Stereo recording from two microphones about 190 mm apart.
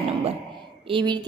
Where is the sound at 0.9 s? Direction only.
25° right (ahead or behind).